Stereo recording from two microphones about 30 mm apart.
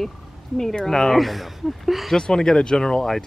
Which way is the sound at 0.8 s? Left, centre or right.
Left.